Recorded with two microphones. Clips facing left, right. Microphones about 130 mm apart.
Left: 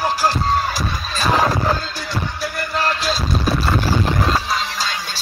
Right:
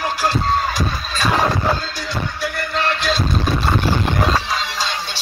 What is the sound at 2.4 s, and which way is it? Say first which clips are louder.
Music: even; 40° left (ahead or behind).